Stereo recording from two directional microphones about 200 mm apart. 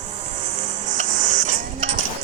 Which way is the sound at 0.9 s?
40° right (ahead or behind).